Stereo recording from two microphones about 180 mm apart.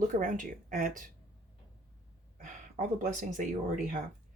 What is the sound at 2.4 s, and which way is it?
Speech, 45° right (ahead or behind).